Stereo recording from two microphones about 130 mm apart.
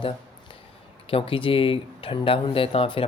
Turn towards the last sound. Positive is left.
turn(degrees=45)  # may be behind; listen again after turning